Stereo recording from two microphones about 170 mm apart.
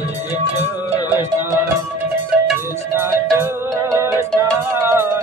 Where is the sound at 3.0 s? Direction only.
15° right (ahead or behind).